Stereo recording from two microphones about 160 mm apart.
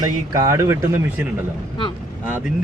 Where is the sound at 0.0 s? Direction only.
20° right (ahead or behind).